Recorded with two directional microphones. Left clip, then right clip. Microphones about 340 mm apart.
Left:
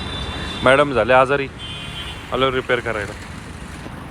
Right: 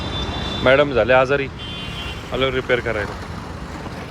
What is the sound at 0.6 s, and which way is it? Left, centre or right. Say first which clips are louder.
Speech: even; centre.